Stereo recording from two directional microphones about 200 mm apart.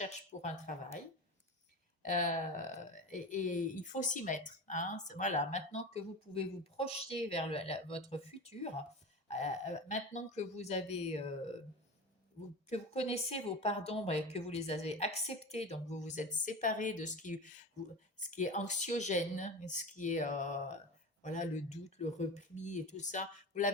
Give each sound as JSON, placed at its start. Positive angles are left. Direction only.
{"t": 0.0, "sound": "speech", "side_deg": 35}
{"t": 2.0, "sound": "speech", "side_deg": 40}